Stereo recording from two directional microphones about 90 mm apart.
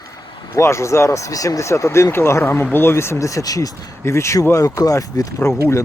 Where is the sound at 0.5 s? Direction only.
35° left (ahead or behind).